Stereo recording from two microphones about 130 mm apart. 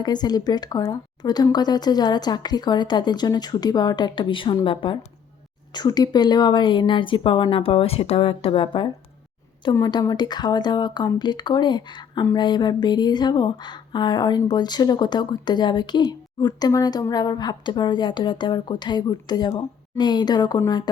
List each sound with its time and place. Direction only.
0.0 s speech: 35° left (ahead or behind)
9.7 s speech: 30° left (ahead or behind)